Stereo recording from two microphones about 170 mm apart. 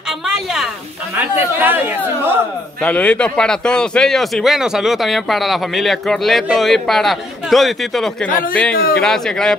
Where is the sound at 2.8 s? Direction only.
5° left (ahead or behind).